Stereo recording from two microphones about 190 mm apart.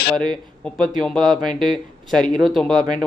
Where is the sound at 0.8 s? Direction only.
Centre (ahead or behind).